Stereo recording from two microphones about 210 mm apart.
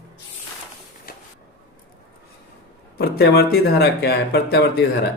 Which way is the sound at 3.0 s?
50° left (ahead or behind).